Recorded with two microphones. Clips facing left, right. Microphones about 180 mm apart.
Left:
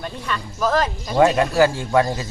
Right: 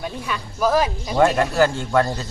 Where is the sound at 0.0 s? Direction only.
10° right (ahead or behind).